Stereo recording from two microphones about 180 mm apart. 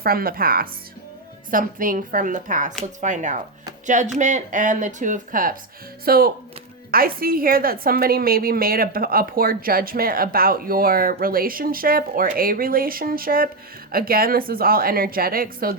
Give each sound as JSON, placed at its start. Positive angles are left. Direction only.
{"t": 0.0, "sound": "a woman's voice", "side_deg": -55}